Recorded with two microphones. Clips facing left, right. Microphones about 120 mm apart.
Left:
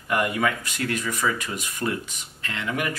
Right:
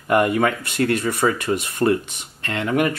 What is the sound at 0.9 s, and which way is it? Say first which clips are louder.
Speech: right 6 dB; 30° right (ahead or behind).